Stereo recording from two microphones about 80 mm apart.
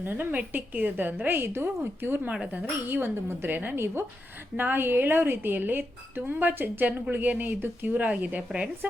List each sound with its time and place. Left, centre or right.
0.0 s speech: right